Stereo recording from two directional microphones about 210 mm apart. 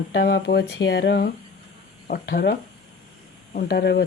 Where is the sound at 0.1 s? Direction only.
55° left (ahead or behind).